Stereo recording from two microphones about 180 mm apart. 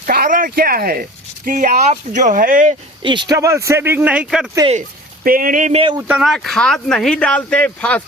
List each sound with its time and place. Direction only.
0.0 s speech: 50° right (ahead or behind)
3.0 s speech: 25° right (ahead or behind); by 4.5 s 5° right (ahead or behind)
5.2 s speech: 50° right (ahead or behind)
6.0 s speech: 10° right (ahead or behind); by 8.0 s 5° left (ahead or behind)